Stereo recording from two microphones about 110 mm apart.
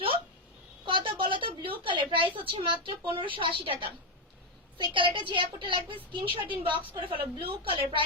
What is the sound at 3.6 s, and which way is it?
A woman's voice, 50° right (ahead or behind).